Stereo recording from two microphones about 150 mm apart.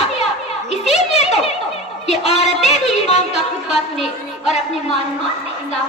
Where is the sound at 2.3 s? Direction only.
Centre (ahead or behind).